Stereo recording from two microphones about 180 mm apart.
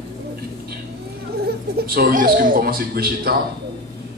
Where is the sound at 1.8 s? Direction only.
55° right (ahead or behind).